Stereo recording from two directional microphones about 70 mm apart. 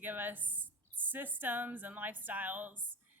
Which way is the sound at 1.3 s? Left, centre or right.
Right.